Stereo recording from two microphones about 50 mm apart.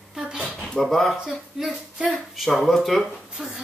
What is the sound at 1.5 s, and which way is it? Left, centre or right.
Speech, centre.